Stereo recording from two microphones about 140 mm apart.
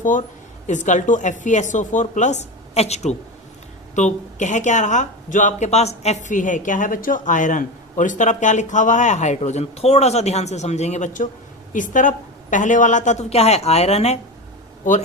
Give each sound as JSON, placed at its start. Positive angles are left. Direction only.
{"t": 0.0, "sound": "speech", "side_deg": 65}